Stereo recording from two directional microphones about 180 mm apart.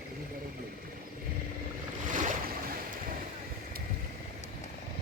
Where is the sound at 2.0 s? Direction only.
45° right (ahead or behind).